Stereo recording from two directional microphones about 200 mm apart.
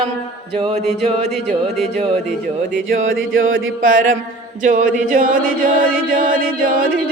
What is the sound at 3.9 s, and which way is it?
Chant, 45° right (ahead or behind).